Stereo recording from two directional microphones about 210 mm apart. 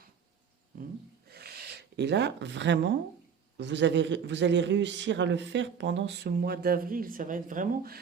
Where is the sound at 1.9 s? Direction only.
55° right (ahead or behind).